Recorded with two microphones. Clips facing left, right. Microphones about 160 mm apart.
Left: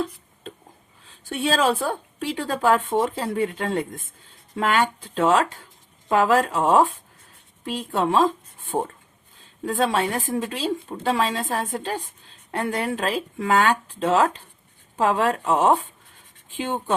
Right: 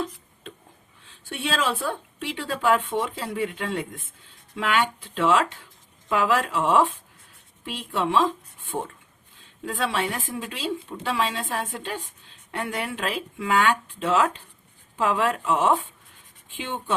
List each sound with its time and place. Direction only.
1.0 s speech: 40° left (ahead or behind)